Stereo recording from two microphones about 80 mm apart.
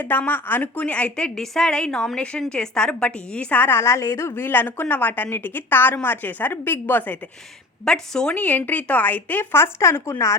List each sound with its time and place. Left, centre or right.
0.0 s a woman's voice: left
7.9 s a woman's voice: centre
8.4 s a woman's voice: left
9.8 s speech: left